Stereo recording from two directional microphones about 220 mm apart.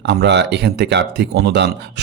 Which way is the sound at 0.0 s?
50° right (ahead or behind).